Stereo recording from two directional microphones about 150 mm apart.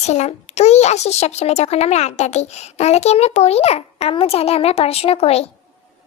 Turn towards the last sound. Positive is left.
turn(degrees=40)  # may be behind; listen again after turning